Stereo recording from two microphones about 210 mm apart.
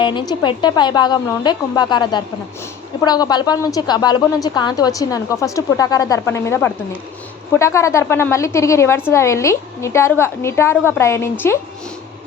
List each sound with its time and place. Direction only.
0.0 s a woman's voice: 20° left (ahead or behind)